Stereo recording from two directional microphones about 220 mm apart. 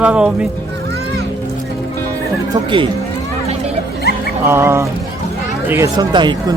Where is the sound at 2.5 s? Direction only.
20° right (ahead or behind).